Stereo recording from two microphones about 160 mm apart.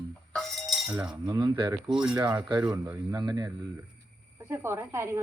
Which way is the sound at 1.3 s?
30° right (ahead or behind).